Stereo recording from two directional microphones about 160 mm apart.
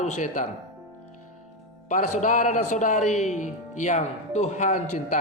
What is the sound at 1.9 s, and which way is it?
Speech, 50° left (ahead or behind).